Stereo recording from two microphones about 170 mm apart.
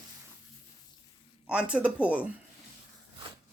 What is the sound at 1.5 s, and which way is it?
Speech, 5° right (ahead or behind).